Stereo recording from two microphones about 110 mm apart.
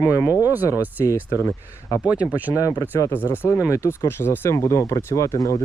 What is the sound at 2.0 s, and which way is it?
Speech, 10° right (ahead or behind).